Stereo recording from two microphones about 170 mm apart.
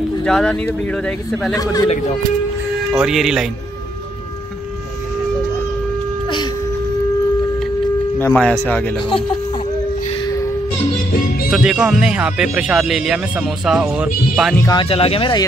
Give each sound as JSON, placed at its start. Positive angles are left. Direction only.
{"t": 0.2, "sound": "speech", "side_deg": 5}
{"t": 1.5, "sound": "speech", "side_deg": 20}
{"t": 2.9, "sound": "speech", "side_deg": -5}
{"t": 8.2, "sound": "speech", "side_deg": 5}
{"t": 11.5, "sound": "speech", "side_deg": -5}
{"t": 14.7, "sound": "speech", "side_deg": 30}